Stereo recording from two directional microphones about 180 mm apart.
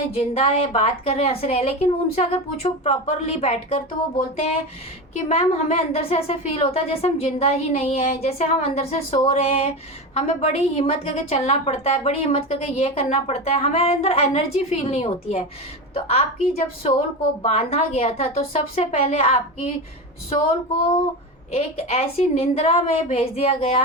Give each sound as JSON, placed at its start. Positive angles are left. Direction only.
{"t": 0.2, "sound": "a woman's voice", "side_deg": 35}
{"t": 5.3, "sound": "a woman's voice", "side_deg": 35}
{"t": 21.5, "sound": "a woman's voice", "side_deg": 35}